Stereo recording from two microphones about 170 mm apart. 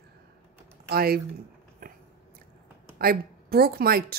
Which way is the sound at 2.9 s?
60° right (ahead or behind).